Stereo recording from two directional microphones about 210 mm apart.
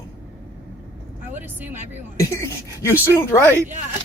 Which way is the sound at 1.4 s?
10° right (ahead or behind).